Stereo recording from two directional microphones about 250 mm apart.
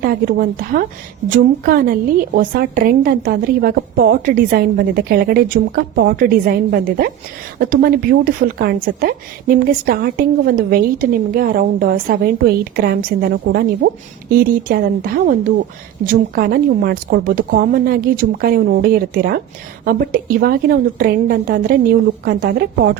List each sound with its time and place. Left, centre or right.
0.0 s a woman's voice: right